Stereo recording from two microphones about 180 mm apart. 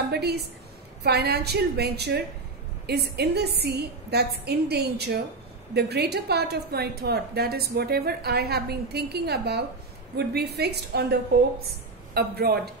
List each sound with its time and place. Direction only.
0.1 s a woman's voice: 65° right (ahead or behind)